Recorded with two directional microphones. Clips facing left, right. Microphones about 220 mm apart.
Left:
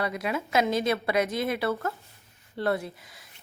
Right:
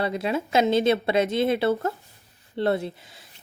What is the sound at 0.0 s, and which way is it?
A woman's voice, 30° right (ahead or behind).